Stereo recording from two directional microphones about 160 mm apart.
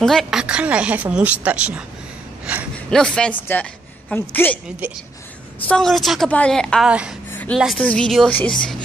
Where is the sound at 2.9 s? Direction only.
5° left (ahead or behind).